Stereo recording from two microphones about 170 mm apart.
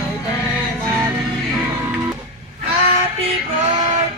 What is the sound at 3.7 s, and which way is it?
Child singing, 40° right (ahead or behind).